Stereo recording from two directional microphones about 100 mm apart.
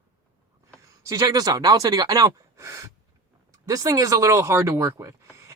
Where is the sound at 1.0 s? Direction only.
35° right (ahead or behind).